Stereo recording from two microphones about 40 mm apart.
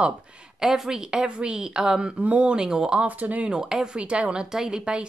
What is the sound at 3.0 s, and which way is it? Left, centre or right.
Speech, right.